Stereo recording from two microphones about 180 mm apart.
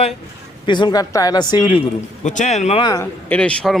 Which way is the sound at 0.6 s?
25° left (ahead or behind).